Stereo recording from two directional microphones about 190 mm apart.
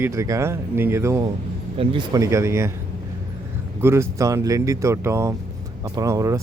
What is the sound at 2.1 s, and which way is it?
Speech, 15° right (ahead or behind).